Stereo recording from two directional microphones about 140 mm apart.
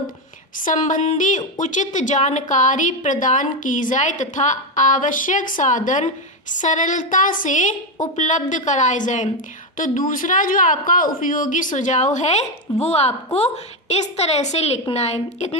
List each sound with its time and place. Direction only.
0.6 s a woman's voice: 65° left (ahead or behind)